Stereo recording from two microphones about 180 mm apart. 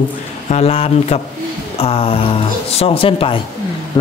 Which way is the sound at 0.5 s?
35° left (ahead or behind).